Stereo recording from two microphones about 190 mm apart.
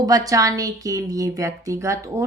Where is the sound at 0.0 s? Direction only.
20° right (ahead or behind).